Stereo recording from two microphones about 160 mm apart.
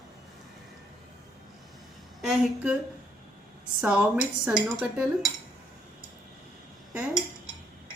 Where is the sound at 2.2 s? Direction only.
5° right (ahead or behind).